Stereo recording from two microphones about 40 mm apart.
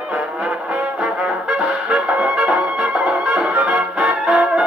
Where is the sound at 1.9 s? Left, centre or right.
Right.